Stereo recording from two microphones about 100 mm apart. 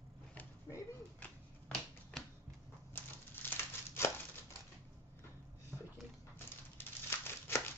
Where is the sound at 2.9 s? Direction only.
20° left (ahead or behind).